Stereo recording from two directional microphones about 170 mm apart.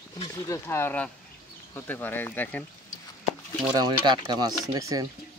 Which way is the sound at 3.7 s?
25° right (ahead or behind).